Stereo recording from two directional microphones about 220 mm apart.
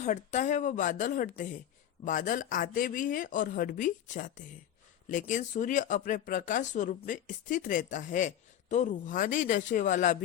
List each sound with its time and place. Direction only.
0.0 s speech: 30° left (ahead or behind)